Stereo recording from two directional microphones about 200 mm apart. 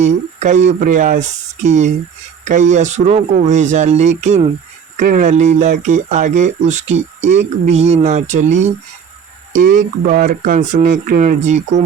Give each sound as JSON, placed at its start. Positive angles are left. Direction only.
{"t": 0.0, "sound": "speech", "side_deg": -35}
{"t": 9.7, "sound": "speech", "side_deg": -40}